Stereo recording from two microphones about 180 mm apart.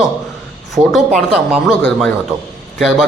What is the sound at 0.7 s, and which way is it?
Speech, centre (ahead or behind).